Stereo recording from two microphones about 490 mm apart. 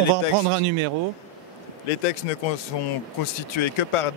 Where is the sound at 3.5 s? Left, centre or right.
Left.